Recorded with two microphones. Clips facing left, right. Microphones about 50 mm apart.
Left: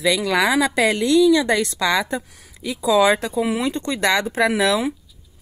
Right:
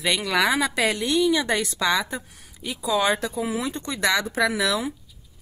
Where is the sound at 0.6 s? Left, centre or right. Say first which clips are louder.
Left 5 dB; left.